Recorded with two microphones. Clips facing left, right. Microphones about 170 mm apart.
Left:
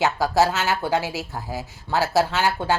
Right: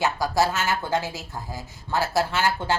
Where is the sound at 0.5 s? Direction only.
15° left (ahead or behind).